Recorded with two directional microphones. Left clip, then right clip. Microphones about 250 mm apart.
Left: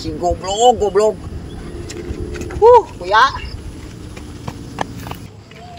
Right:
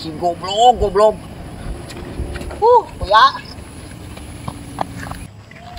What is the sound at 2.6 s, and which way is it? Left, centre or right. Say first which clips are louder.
Speech: left 3 dB; centre.